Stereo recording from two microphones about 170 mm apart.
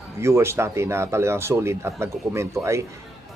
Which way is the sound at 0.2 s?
15° right (ahead or behind).